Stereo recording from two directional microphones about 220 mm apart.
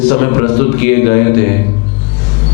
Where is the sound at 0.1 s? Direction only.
15° left (ahead or behind).